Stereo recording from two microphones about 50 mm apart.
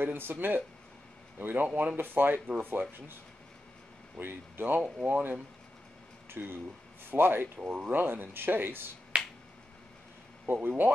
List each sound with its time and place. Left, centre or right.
0.0 s speech: right
4.2 s speech: right
6.3 s speech: right
7.5 s speech: right
9.1 s finger snapping: right
10.4 s speech: right